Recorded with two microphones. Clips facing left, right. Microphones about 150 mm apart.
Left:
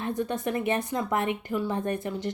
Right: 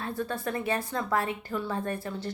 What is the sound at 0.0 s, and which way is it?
A woman's voice, 20° left (ahead or behind).